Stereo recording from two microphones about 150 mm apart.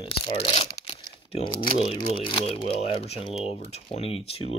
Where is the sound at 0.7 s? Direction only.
40° left (ahead or behind).